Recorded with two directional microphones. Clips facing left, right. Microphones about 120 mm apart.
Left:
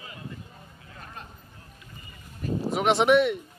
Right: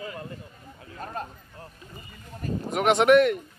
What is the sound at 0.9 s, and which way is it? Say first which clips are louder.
Speech: right 9 dB; 45° right (ahead or behind).